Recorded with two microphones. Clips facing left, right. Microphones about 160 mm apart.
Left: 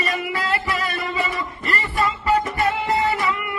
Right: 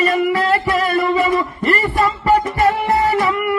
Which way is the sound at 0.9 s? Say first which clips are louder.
Right 11 dB; 45° right (ahead or behind).